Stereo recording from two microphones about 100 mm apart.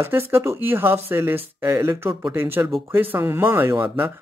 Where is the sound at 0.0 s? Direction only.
25° right (ahead or behind).